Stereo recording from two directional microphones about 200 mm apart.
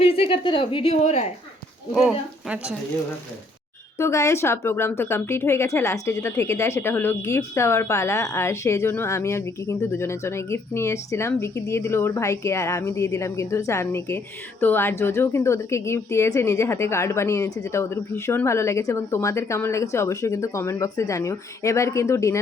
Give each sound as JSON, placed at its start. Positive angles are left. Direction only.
{"t": 0.0, "sound": "speech", "side_deg": 30}
{"t": 1.9, "sound": "speech", "side_deg": 0}
{"t": 3.9, "sound": "speech", "side_deg": 15}